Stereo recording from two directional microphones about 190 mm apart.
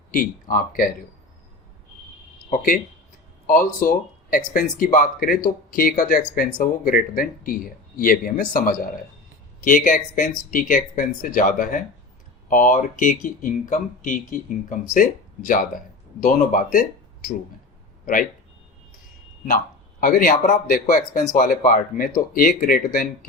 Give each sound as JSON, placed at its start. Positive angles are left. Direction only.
{"t": 0.1, "sound": "speech", "side_deg": 45}
{"t": 2.5, "sound": "a man's voice", "side_deg": 45}
{"t": 20.0, "sound": "speech", "side_deg": 45}